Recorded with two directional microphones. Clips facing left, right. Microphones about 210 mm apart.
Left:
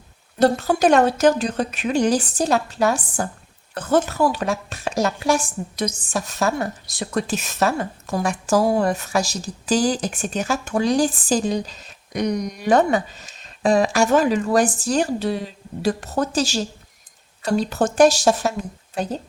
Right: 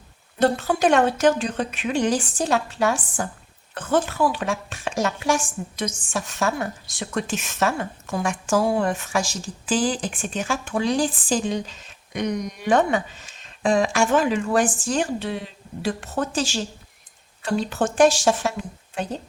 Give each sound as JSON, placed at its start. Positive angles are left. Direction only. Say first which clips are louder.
{"t": 0.3, "sound": "a woman's voice", "louder": "left 3 dB", "side_deg": 40}